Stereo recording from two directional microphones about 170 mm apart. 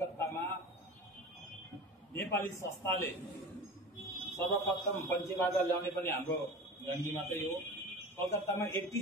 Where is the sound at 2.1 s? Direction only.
15° left (ahead or behind).